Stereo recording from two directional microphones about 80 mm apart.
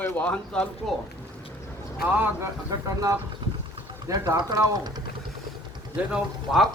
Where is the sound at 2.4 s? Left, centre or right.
Right.